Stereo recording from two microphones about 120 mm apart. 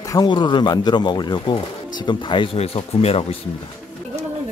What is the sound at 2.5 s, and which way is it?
Speech, 60° left (ahead or behind).